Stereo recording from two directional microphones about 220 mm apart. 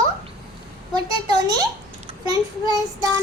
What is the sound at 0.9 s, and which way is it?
A child's voice, 20° right (ahead or behind).